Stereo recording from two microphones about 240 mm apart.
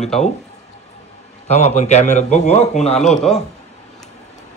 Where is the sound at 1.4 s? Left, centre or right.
Left.